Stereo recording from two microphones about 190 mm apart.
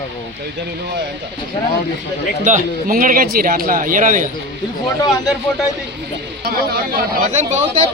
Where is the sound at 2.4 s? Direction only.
45° right (ahead or behind).